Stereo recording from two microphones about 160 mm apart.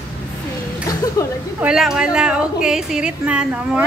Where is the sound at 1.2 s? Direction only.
20° left (ahead or behind).